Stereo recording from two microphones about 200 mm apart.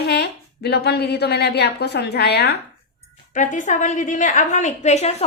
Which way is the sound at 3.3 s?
40° left (ahead or behind).